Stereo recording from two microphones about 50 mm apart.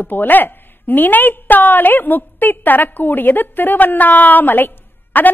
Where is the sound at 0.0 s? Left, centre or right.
Left.